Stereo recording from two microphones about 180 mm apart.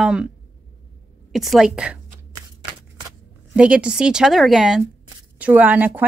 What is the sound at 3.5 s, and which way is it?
A woman's voice, 5° right (ahead or behind).